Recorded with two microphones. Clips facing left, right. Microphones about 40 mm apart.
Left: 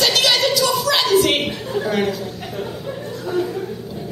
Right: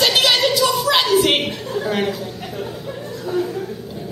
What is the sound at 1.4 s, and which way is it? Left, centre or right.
Speech, centre.